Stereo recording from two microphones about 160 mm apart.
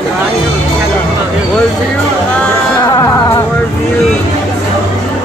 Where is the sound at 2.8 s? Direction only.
20° left (ahead or behind).